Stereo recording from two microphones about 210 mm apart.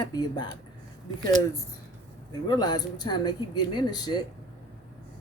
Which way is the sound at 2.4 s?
20° left (ahead or behind).